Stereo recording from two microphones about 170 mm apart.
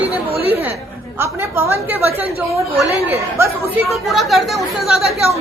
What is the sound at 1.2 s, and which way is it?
Speech, 15° right (ahead or behind).